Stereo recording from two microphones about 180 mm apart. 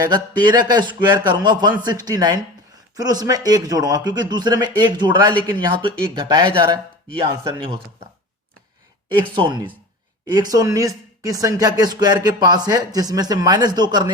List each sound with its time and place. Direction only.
0.0 s speech: 25° right (ahead or behind)
9.3 s speech: 25° right (ahead or behind)